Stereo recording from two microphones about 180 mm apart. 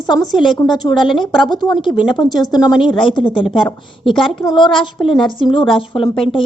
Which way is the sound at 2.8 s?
30° left (ahead or behind).